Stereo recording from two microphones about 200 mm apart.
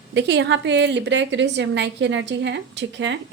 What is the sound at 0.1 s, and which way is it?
A woman's voice, 60° right (ahead or behind).